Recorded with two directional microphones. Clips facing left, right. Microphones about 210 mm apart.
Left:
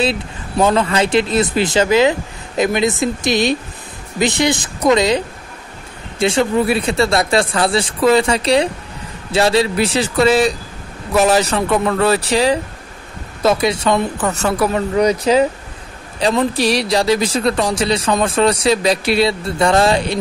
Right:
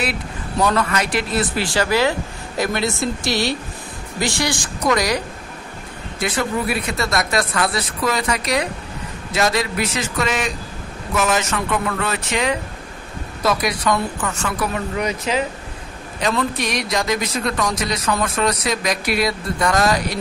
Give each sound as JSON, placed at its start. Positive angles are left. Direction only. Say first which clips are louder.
{"t": 0.0, "sound": "a man's voice", "louder": "left 6 dB", "side_deg": 25}